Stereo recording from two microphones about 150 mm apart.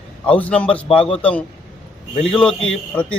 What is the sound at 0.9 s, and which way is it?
Speech, 35° left (ahead or behind).